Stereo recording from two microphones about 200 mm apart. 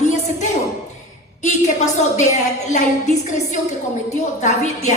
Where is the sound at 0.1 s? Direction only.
35° left (ahead or behind).